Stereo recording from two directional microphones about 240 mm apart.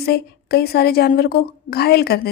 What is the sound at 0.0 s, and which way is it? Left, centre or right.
A woman's voice, left.